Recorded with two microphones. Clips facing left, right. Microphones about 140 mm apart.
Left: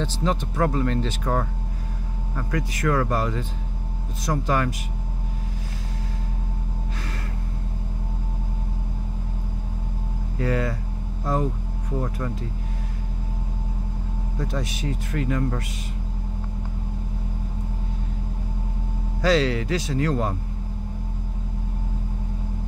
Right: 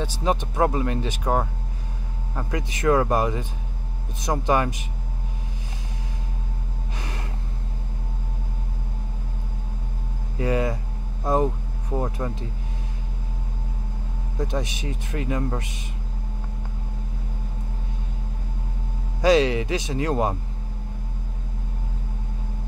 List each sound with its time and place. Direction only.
0.0 s speech: 15° right (ahead or behind)
10.4 s speech: 20° right (ahead or behind)
14.4 s speech: 20° right (ahead or behind)
19.2 s speech: 20° right (ahead or behind)